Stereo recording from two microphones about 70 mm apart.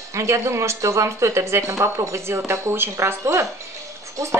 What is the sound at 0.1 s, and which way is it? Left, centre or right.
Speech, right.